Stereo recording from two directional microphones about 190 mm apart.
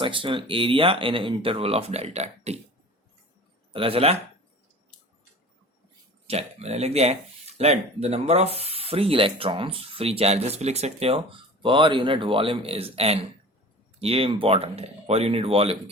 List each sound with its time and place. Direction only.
0.0 s speech: 25° right (ahead or behind)
3.7 s speech: 30° right (ahead or behind)
6.2 s speech: 35° right (ahead or behind)